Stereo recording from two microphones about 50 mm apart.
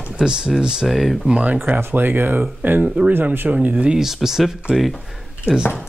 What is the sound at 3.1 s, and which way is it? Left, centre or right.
Speech, right.